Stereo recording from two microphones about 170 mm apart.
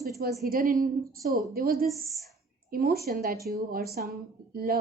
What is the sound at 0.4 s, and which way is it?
A woman's voice, 55° right (ahead or behind).